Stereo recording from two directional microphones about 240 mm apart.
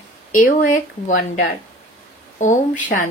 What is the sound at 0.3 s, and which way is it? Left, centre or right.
Speech, left.